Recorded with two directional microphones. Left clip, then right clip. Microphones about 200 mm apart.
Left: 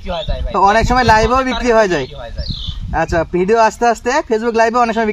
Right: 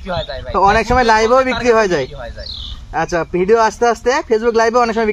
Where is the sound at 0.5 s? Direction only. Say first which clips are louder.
Left 1 dB; 50° left (ahead or behind).